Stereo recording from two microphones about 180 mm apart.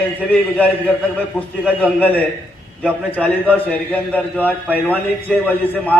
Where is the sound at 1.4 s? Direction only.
10° left (ahead or behind).